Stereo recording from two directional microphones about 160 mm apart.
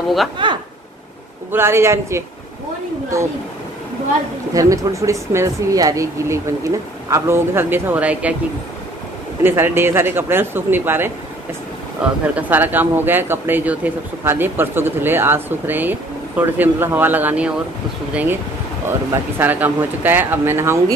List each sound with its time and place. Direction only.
0.4 s a sound: 30° right (ahead or behind)
1.5 s speech: 15° right (ahead or behind)
4.6 s speech: 20° right (ahead or behind)
9.4 s speech: 15° right (ahead or behind)